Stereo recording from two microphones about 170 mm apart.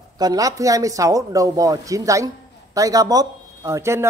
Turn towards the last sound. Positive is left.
turn(degrees=-15)  # may be behind; listen again after turning